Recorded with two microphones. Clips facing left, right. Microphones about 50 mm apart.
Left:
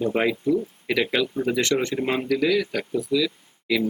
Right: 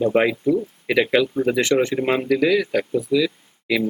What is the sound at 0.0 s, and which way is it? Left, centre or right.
Speech, centre.